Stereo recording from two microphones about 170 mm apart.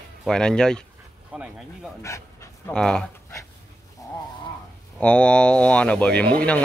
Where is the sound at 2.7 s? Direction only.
5° left (ahead or behind).